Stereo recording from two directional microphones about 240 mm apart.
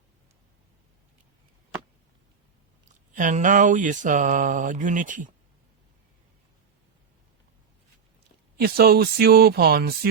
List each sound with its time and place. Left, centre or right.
3.1 s mantra: right
8.5 s mantra: right